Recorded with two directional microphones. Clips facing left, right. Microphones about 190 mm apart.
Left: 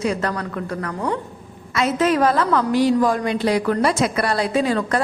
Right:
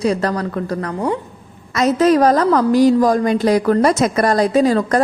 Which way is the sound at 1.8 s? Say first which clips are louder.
Right 5 dB; 40° right (ahead or behind).